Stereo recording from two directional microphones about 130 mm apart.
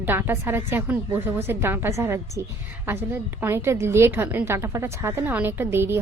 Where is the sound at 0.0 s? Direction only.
15° right (ahead or behind).